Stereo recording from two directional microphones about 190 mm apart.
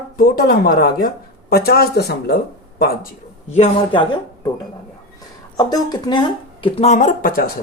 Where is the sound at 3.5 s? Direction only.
35° left (ahead or behind).